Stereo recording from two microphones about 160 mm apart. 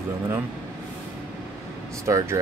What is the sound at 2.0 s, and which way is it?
Speech, 15° right (ahead or behind).